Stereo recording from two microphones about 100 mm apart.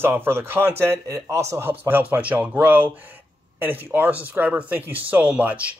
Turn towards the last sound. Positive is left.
turn(degrees=-15)  # may be behind; listen again after turning